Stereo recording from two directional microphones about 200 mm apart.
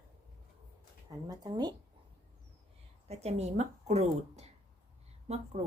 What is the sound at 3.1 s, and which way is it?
Speech, 30° right (ahead or behind).